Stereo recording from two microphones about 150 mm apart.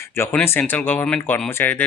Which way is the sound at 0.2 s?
15° left (ahead or behind).